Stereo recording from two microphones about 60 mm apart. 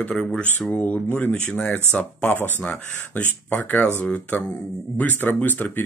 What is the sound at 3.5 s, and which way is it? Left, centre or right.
Speech, left.